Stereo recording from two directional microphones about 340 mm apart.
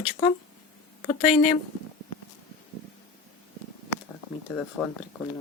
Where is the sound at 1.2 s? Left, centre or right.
Left.